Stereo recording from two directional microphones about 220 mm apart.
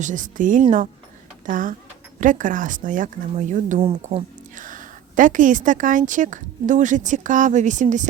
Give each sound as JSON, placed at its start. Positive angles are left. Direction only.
{"t": 0.0, "sound": "speech", "side_deg": -35}